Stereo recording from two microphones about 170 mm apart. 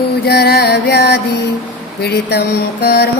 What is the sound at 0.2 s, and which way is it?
Music, 70° left (ahead or behind).